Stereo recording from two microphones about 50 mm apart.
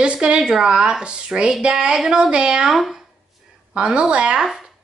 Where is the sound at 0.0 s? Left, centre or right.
Right.